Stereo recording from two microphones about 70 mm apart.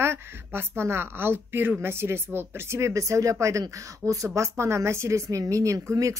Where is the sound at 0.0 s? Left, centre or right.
Right.